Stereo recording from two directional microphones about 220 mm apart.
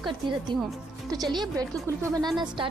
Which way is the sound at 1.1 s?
20° right (ahead or behind).